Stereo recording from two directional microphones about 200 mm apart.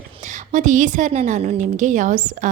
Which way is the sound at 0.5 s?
40° right (ahead or behind).